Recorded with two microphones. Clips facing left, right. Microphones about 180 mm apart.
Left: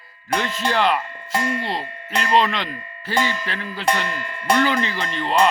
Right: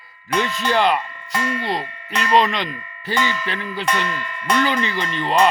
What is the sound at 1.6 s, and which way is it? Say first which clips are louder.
Music: right 2 dB; centre (ahead or behind).